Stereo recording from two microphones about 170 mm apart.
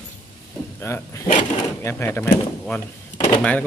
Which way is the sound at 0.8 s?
15° left (ahead or behind).